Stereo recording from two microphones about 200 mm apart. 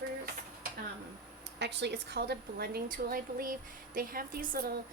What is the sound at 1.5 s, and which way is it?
A woman's voice, 60° right (ahead or behind).